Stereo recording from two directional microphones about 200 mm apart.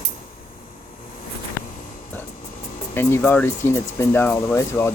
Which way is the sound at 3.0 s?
10° left (ahead or behind).